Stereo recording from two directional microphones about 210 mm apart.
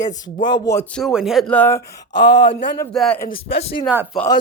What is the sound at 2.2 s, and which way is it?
Speech, 55° left (ahead or behind).